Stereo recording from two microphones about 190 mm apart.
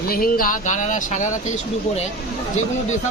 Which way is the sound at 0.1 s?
50° left (ahead or behind).